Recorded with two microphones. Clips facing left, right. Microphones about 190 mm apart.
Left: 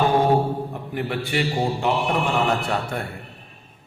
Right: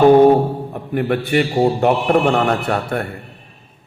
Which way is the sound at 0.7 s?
60° right (ahead or behind).